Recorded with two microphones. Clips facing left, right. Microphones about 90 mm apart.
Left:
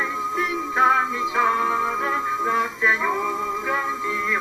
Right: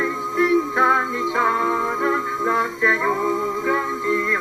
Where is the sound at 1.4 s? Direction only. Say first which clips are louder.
Right 1 dB; 25° right (ahead or behind).